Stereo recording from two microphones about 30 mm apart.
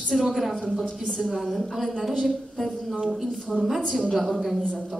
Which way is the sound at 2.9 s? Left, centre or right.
Centre.